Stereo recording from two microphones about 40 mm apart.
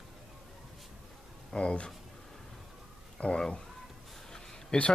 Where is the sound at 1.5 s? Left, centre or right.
Left.